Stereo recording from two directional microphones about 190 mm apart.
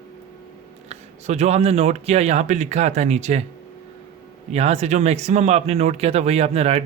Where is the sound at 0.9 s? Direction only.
35° right (ahead or behind).